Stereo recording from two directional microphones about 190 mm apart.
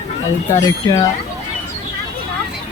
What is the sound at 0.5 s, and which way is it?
Speech, 20° left (ahead or behind).